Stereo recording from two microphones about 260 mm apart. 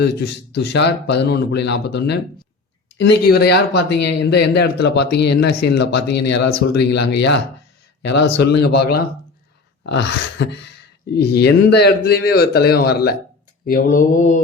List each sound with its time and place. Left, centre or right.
0.0 s speech: left